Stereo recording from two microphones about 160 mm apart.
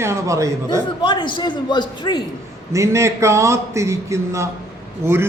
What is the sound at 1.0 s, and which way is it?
A woman's voice, 30° left (ahead or behind).